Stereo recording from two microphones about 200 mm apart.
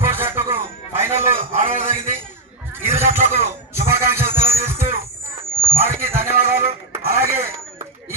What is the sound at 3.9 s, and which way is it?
Music, 10° right (ahead or behind).